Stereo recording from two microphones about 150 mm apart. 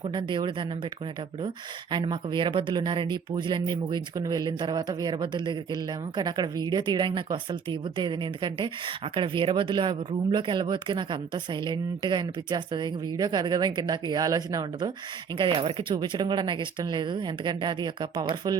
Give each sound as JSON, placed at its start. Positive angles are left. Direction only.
{"t": 0.1, "sound": "speech", "side_deg": -35}
{"t": 1.9, "sound": "speech", "side_deg": -30}